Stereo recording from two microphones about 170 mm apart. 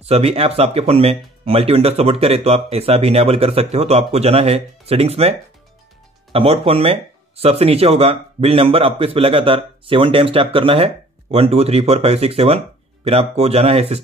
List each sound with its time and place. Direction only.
0.0 s speech: 35° right (ahead or behind)
6.3 s speech: 35° right (ahead or behind)